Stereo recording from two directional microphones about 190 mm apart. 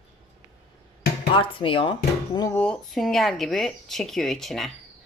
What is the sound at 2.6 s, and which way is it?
A woman's voice, 5° left (ahead or behind).